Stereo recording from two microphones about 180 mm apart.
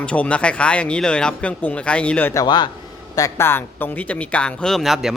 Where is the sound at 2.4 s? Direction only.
25° left (ahead or behind); by 5.1 s centre (ahead or behind).